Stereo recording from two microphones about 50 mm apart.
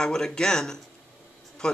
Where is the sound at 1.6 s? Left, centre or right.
Centre.